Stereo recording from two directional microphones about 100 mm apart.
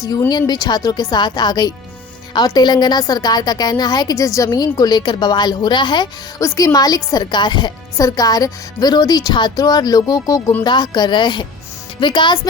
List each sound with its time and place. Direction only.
0.3 s a woman's voice: 45° left (ahead or behind)
6.4 s speech: 30° left (ahead or behind)
6.7 s speech: 40° left (ahead or behind)
10.6 s a woman's voice: 50° left (ahead or behind)